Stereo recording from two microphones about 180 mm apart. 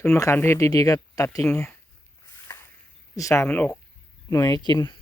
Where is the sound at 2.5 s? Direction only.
15° left (ahead or behind).